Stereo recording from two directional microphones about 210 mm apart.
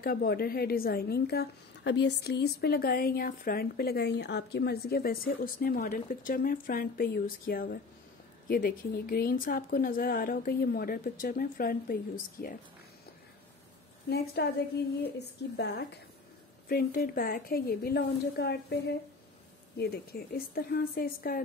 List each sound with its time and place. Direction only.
0.0 s a woman's voice: 45° left (ahead or behind)
14.0 s a woman's voice: 50° left (ahead or behind)